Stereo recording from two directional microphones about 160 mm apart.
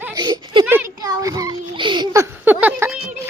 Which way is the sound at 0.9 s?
25° right (ahead or behind).